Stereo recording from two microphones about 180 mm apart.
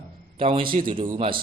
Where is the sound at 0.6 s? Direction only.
50° right (ahead or behind).